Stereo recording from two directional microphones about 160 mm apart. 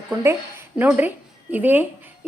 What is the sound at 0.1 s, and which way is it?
Speech, 15° right (ahead or behind).